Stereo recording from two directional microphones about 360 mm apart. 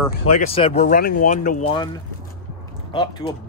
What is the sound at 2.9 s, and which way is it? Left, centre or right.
Speech, centre.